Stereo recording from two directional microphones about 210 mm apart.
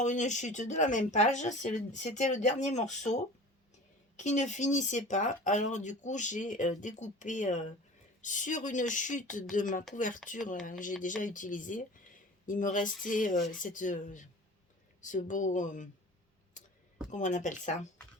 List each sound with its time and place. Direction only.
0.0 s speech: 35° left (ahead or behind)
4.2 s speech: 35° left (ahead or behind)
16.6 s a sound: 35° left (ahead or behind)
17.1 s speech: 35° left (ahead or behind)